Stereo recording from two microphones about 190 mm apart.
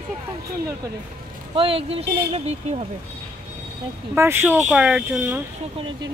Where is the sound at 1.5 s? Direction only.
30° right (ahead or behind).